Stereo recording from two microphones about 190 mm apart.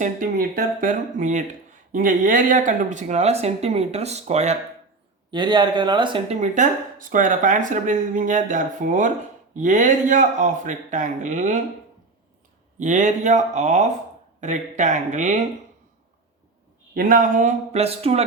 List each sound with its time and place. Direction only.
0.0 s speech: 45° right (ahead or behind)
5.3 s speech: 25° right (ahead or behind)
6.4 s speech: 40° right (ahead or behind)
12.8 s speech: 40° right (ahead or behind)
16.9 s speech: 50° right (ahead or behind); by 18.2 s 30° right (ahead or behind)